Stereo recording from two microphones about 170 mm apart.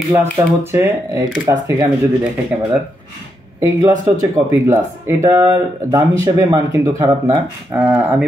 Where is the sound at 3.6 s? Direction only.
20° right (ahead or behind).